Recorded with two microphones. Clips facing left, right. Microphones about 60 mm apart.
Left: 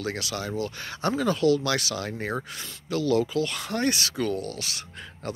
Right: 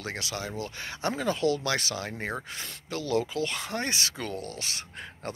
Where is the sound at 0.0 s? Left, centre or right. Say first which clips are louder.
Left 4 dB; right.